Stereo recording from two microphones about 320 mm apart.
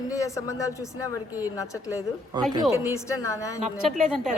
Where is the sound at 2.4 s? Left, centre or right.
Centre.